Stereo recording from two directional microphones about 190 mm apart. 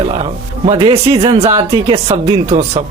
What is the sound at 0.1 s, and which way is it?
Speech, 30° right (ahead or behind).